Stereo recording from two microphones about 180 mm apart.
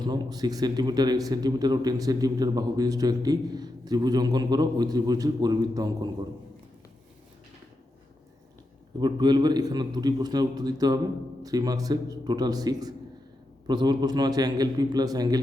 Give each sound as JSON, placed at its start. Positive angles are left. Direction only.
{"t": 0.0, "sound": "a man's voice", "side_deg": -20}
{"t": 9.0, "sound": "a man's voice", "side_deg": -25}